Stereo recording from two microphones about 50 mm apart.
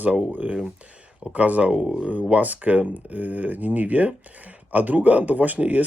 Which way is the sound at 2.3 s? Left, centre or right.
Right.